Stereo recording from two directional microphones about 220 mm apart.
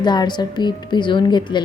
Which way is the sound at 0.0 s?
20° left (ahead or behind).